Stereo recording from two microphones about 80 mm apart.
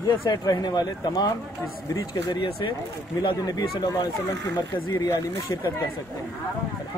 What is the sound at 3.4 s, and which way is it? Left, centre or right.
Speech, left.